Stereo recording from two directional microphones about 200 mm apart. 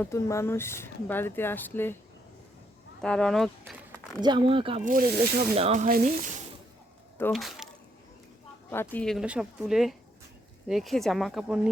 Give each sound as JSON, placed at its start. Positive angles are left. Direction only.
{"t": 0.0, "sound": "speech", "side_deg": 15}
{"t": 3.0, "sound": "speech", "side_deg": 5}
{"t": 3.7, "sound": "a sound", "side_deg": 10}
{"t": 4.2, "sound": "speech", "side_deg": -25}
{"t": 4.9, "sound": "speech", "side_deg": -45}
{"t": 5.5, "sound": "speech", "side_deg": -35}
{"t": 7.3, "sound": "speech", "side_deg": 0}
{"t": 8.7, "sound": "speech", "side_deg": 10}